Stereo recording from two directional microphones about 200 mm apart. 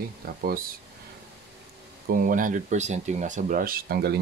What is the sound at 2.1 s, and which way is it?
Speech, 45° right (ahead or behind).